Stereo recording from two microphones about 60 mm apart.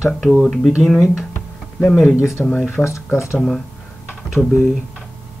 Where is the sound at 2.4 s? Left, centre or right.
Centre.